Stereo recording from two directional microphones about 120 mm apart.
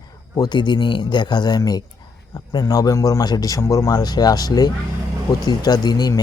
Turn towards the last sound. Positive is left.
turn(degrees=35)  # may be behind; listen again after turning